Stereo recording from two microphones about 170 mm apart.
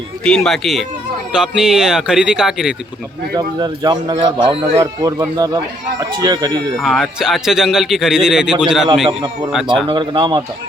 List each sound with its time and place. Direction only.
0.3 s speech: 5° left (ahead or behind)
3.3 s speech: 25° right (ahead or behind)
6.7 s speech: centre (ahead or behind)
9.9 s speech: 25° right (ahead or behind)